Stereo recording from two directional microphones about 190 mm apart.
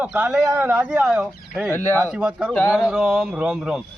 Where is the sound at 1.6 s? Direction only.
10° left (ahead or behind).